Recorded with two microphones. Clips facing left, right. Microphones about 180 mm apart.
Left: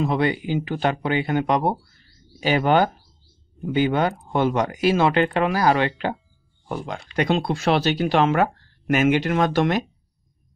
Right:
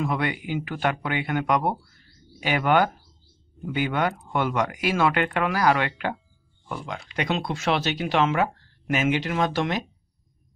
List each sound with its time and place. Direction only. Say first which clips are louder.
0.0 s speech: left 5 dB; 30° left (ahead or behind)
7.2 s speech: left 6 dB; 35° left (ahead or behind)
8.3 s speech: left 4 dB; 55° left (ahead or behind)